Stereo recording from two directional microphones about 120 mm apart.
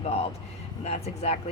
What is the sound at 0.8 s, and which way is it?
Speech, 60° left (ahead or behind).